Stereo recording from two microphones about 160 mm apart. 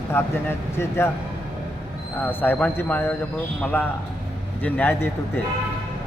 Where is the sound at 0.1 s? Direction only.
15° left (ahead or behind).